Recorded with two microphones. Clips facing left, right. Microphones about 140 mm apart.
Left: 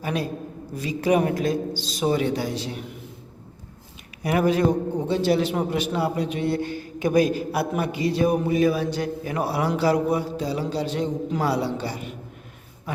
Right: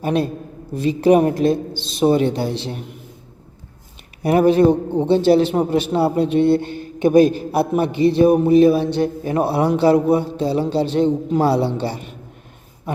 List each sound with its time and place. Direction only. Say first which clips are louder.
0.8 s a man's voice: right 7 dB; 30° right (ahead or behind)
4.2 s a man's voice: right 7 dB; 30° right (ahead or behind)